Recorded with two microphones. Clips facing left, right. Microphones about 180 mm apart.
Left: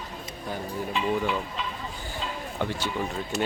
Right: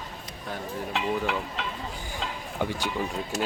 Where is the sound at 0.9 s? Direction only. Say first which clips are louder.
Left 1 dB; 70° right (ahead or behind).